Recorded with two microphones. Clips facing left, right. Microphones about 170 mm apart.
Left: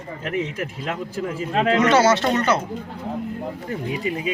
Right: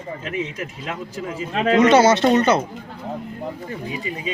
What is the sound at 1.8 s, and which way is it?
Speech, 20° right (ahead or behind).